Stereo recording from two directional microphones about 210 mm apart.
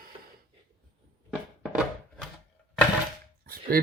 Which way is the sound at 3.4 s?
45° right (ahead or behind).